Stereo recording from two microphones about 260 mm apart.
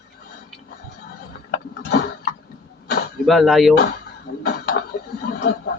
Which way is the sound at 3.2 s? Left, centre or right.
Centre.